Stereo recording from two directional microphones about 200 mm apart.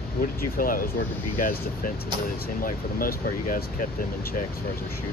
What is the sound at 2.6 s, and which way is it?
Speech, 45° left (ahead or behind).